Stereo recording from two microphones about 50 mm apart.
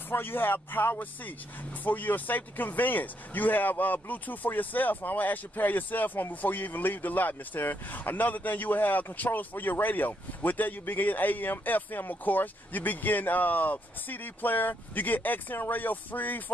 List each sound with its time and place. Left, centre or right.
0.1 s speech: left